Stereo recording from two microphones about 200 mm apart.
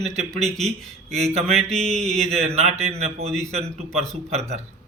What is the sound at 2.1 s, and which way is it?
Speech, 35° right (ahead or behind).